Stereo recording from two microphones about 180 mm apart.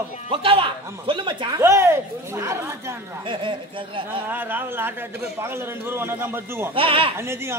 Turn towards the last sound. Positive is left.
turn(degrees=-15)  # may be behind; listen again after turning